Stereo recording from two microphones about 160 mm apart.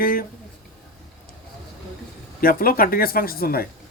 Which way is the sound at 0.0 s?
65° left (ahead or behind).